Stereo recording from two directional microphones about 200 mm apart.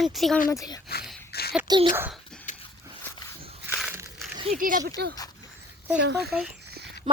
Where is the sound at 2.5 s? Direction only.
40° left (ahead or behind).